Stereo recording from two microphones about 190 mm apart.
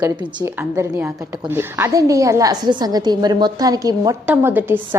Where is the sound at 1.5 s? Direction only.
10° right (ahead or behind).